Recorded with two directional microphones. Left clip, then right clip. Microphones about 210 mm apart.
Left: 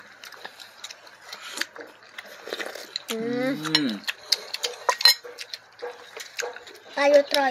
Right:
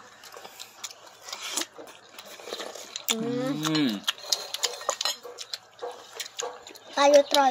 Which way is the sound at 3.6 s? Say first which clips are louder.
Even; 40° right (ahead or behind).